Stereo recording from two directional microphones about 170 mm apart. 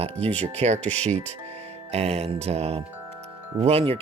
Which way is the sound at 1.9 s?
40° right (ahead or behind).